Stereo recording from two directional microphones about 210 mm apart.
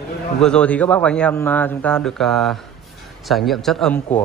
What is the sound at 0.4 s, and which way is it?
A man's voice, 5° left (ahead or behind).